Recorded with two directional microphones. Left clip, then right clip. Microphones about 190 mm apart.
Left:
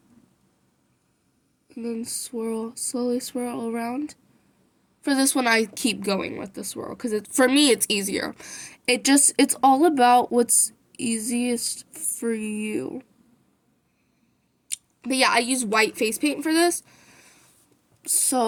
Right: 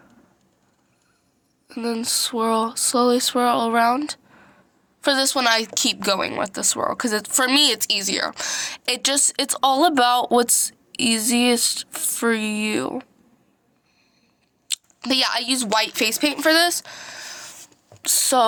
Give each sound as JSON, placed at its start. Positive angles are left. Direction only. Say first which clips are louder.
{"t": 1.6, "sound": "a sound", "louder": "right 6 dB", "side_deg": 5}
{"t": 2.0, "sound": "a woman's voice", "louder": "right 9 dB", "side_deg": 5}
{"t": 15.0, "sound": "a woman's voice", "louder": "even", "side_deg": 10}
{"t": 16.0, "sound": "speech", "louder": "right 3 dB", "side_deg": -40}
{"t": 16.8, "sound": "a sound", "louder": "right 17 dB", "side_deg": 10}
{"t": 18.0, "sound": "a woman's voice", "louder": "right 6 dB", "side_deg": 0}